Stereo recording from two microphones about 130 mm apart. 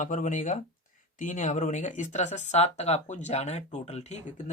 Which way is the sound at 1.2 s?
85° left.